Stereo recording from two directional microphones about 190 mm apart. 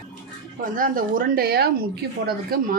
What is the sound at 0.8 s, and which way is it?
Speech, 45° right (ahead or behind).